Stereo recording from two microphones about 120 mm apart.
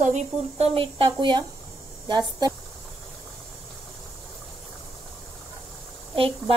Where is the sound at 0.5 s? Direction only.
55° right (ahead or behind); by 2.5 s 35° right (ahead or behind).